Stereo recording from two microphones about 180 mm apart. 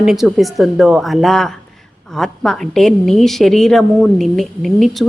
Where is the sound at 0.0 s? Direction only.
5° right (ahead or behind).